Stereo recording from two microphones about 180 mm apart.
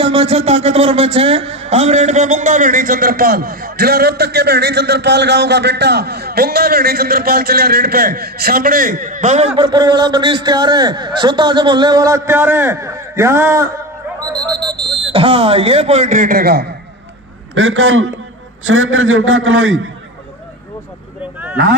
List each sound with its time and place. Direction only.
0.0 s speech: 30° right (ahead or behind)
9.6 s a man's voice: 25° right (ahead or behind)
14.5 s a sound: 25° right (ahead or behind)
15.1 s speech: 30° right (ahead or behind); by 16.7 s 60° right (ahead or behind)
17.6 s a man's voice: 90° right